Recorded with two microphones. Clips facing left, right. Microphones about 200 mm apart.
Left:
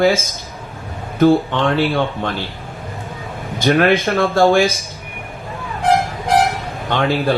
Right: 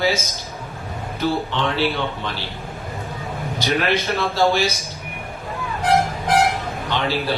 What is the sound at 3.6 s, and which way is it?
Speech, 50° left (ahead or behind).